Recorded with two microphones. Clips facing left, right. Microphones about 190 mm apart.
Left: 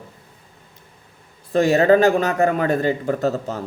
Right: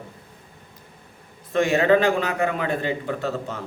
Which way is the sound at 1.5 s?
40° left (ahead or behind).